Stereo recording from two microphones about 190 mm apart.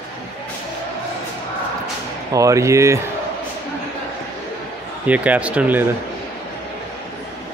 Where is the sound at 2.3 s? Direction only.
15° right (ahead or behind).